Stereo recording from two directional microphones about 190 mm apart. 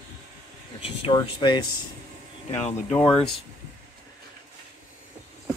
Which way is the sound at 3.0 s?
30° left (ahead or behind).